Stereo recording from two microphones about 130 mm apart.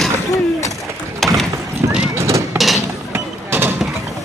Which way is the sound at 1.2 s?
Centre (ahead or behind).